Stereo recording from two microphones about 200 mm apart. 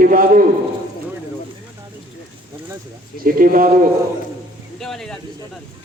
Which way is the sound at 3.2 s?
45° right (ahead or behind).